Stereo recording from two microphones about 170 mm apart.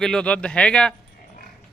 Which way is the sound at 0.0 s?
5° left (ahead or behind).